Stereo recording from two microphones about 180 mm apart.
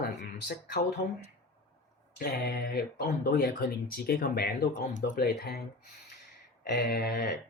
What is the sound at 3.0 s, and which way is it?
Speech, 55° left (ahead or behind).